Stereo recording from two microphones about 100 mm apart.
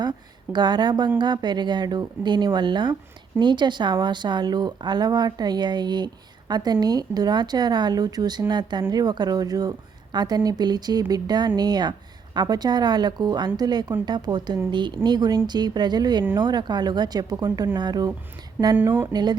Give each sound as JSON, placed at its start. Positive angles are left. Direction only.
{"t": 0.0, "sound": "a woman's voice", "side_deg": -45}
{"t": 18.8, "sound": "speech", "side_deg": -20}
{"t": 19.1, "sound": "a woman's voice", "side_deg": -45}